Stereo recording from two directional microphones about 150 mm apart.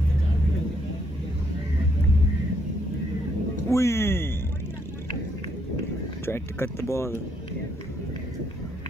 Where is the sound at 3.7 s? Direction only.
20° left (ahead or behind).